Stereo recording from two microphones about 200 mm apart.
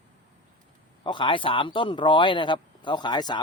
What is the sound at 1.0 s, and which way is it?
Speech, 25° left (ahead or behind).